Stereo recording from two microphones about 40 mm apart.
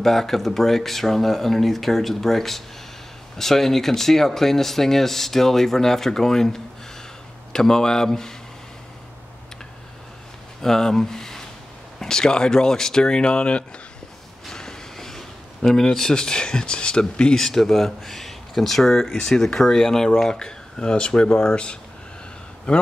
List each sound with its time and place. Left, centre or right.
0.0 s speech: centre
10.6 s speech: centre; by 13.7 s left
14.4 s speech: centre